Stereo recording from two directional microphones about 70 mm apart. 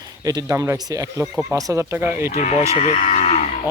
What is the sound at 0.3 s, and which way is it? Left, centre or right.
Speech, right.